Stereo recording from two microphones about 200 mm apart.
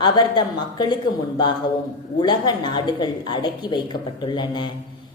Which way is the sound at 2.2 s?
20° left (ahead or behind).